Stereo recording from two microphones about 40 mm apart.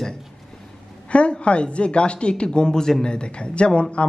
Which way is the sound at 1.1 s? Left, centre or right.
Left.